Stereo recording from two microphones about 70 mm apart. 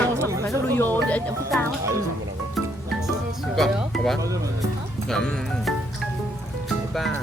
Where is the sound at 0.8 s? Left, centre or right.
Left.